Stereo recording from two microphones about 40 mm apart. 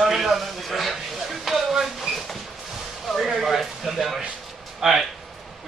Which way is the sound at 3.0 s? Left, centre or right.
Centre.